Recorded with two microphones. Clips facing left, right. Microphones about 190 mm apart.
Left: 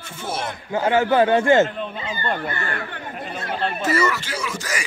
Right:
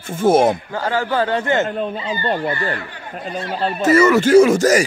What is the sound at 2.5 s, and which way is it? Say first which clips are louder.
Speech: right 4 dB; 50° left (ahead or behind).